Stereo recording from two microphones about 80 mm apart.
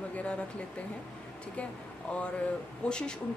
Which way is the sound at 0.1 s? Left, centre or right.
Centre.